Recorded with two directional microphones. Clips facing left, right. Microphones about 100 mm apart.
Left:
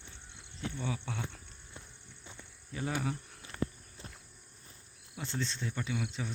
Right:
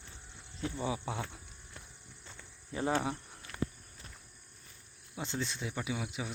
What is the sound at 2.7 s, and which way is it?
Speech, 30° right (ahead or behind).